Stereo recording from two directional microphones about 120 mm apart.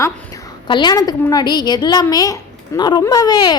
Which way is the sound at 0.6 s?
40° left (ahead or behind).